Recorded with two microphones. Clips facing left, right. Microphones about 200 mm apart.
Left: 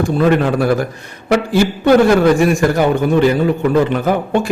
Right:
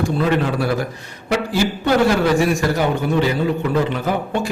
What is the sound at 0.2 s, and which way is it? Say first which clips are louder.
A man's voice: left 7 dB; 50° left (ahead or behind).